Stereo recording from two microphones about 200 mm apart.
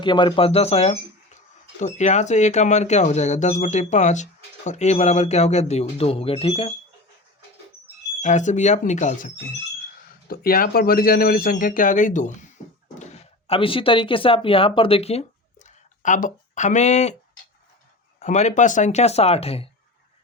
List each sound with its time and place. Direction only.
0.0 s speech: 25° left (ahead or behind)
8.2 s speech: 35° left (ahead or behind)
18.2 s speech: 35° left (ahead or behind)